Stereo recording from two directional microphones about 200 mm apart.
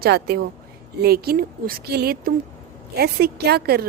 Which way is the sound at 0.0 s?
55° right (ahead or behind).